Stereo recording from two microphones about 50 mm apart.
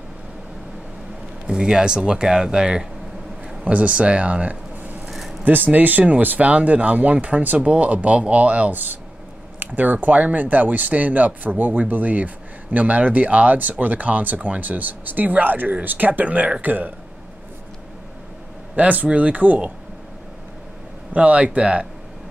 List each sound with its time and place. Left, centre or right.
1.5 s speech: centre
3.6 s speech: right
18.8 s speech: right
21.1 s speech: right